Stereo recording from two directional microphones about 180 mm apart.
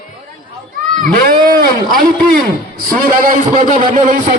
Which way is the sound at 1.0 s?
50° right (ahead or behind).